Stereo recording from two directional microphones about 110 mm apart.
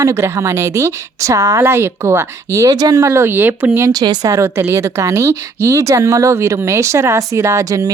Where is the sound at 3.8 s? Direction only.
40° right (ahead or behind).